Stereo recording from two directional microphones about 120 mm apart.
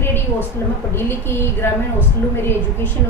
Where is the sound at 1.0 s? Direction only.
20° left (ahead or behind).